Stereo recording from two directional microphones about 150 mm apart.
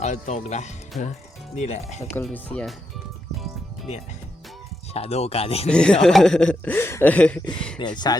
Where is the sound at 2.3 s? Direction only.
10° left (ahead or behind).